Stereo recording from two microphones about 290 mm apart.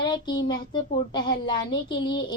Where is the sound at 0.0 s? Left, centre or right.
Centre.